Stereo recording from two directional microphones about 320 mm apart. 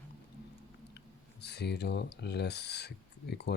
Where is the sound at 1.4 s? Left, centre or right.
Left.